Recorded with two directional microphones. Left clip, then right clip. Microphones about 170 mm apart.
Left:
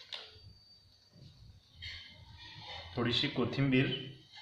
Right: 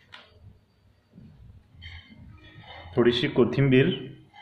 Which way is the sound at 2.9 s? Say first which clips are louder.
Right 11 dB; 50° right (ahead or behind).